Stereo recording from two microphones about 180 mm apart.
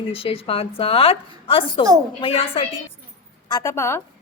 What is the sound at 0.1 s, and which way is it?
A woman's voice, 30° left (ahead or behind).